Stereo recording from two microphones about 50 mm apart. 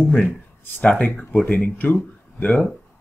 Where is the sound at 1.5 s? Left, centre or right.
Left.